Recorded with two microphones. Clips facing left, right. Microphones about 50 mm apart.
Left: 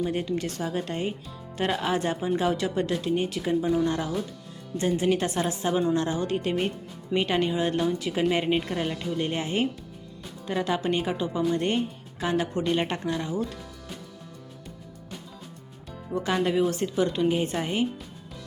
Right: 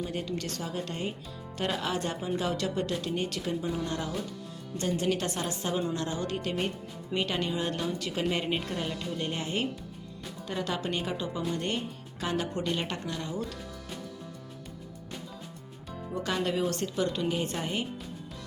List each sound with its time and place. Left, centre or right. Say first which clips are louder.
0.1 s a woman's voice: left 5 dB; left
12.2 s a woman's voice: left 5 dB; centre
16.2 s speech: left 5 dB; left